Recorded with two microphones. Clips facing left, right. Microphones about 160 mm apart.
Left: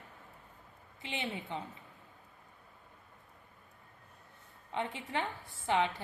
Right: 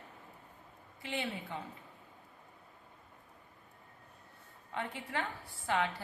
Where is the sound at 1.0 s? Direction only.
20° left (ahead or behind).